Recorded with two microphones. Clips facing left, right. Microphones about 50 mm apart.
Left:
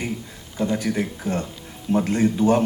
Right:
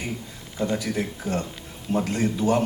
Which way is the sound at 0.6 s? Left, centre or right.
Left.